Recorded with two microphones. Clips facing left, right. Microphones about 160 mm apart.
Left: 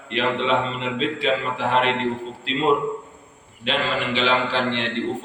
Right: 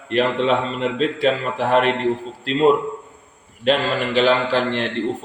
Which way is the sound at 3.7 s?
45° right (ahead or behind).